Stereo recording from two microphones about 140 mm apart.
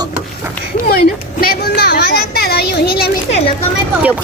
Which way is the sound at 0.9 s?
90° left.